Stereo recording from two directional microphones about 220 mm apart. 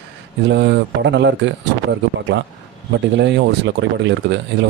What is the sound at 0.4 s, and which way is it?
Speech, 55° right (ahead or behind).